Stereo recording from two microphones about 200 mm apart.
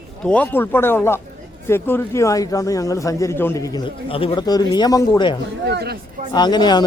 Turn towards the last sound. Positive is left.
turn(degrees=20)  # may be behind; listen again after turning